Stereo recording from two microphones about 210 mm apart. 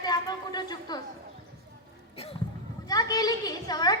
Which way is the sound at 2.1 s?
30° left (ahead or behind).